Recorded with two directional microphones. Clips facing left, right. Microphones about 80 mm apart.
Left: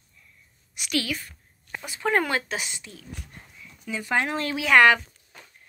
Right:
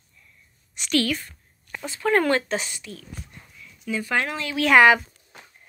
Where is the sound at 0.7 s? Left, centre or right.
Centre.